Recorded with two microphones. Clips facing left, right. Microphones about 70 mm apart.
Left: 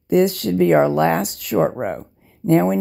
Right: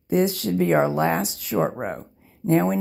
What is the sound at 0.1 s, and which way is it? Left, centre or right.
Speech, left.